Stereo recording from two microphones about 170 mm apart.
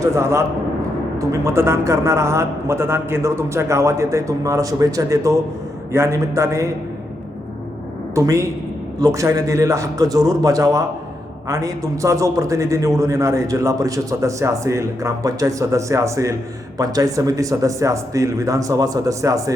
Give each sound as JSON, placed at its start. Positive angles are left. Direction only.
{"t": 0.0, "sound": "a man's voice", "side_deg": -15}
{"t": 8.1, "sound": "a man's voice", "side_deg": -15}